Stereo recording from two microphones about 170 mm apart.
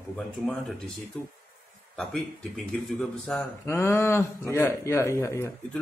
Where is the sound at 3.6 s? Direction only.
15° left (ahead or behind).